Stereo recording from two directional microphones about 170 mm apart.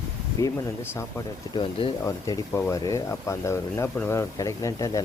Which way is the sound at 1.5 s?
30° left (ahead or behind).